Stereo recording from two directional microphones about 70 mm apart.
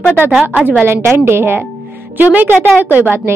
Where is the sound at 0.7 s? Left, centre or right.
Right.